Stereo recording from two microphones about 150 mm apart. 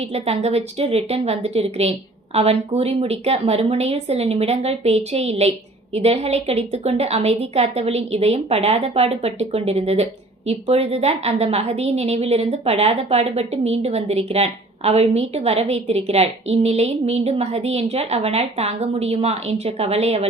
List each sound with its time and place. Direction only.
0.1 s a woman's voice: 45° right (ahead or behind)